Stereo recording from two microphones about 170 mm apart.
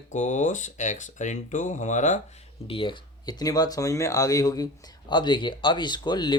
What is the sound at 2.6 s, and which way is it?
Speech, 30° left (ahead or behind).